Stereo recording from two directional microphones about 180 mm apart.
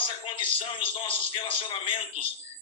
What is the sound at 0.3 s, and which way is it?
Speech, 30° left (ahead or behind).